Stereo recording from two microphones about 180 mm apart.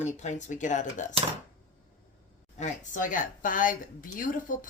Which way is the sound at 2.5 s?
40° left (ahead or behind).